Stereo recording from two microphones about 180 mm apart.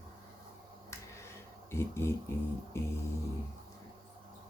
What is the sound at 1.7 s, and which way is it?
Speech, 15° left (ahead or behind).